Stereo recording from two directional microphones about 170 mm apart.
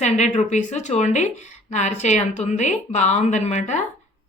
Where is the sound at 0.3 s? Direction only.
45° left (ahead or behind).